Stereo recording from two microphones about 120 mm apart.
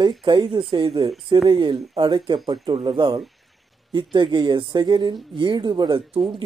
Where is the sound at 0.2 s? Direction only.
45° right (ahead or behind).